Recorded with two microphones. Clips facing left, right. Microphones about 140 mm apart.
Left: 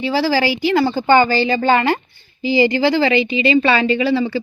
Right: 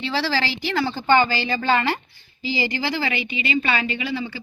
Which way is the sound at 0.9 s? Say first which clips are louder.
Left 2 dB; 45° left (ahead or behind).